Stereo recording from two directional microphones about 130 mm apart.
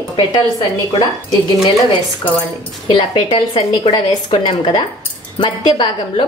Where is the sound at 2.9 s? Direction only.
40° left (ahead or behind).